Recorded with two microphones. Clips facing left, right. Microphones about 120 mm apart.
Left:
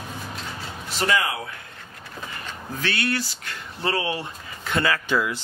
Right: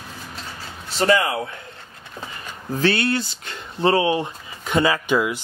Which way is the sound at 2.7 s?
30° right (ahead or behind).